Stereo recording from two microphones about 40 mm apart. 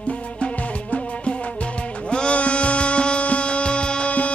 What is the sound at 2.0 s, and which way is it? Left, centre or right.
Music, left.